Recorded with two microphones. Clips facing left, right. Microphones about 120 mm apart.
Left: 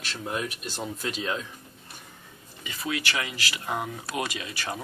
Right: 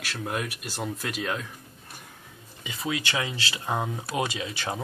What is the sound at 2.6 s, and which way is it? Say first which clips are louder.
Speech: right 1 dB; 20° right (ahead or behind).